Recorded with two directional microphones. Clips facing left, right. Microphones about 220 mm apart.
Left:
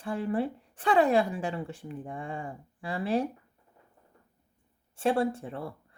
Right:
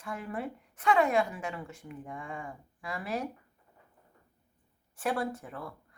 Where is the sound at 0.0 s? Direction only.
30° left (ahead or behind).